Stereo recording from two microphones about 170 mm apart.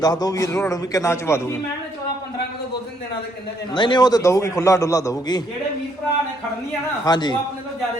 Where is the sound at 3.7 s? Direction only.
25° left (ahead or behind).